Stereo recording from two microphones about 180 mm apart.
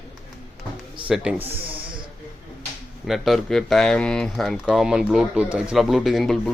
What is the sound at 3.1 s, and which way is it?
Speech, centre (ahead or behind).